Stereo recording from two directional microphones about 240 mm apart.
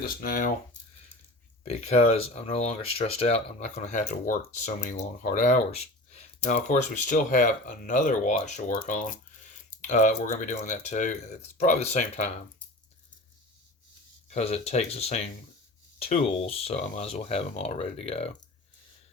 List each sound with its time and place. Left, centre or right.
0.0 s speech: left
1.6 s speech: left
14.3 s speech: left